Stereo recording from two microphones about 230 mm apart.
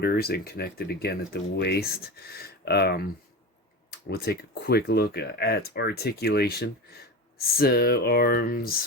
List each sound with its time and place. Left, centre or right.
0.0 s speech: left
4.1 s speech: left